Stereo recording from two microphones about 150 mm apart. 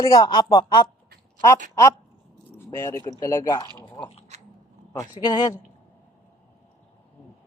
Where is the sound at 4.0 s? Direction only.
45° left (ahead or behind).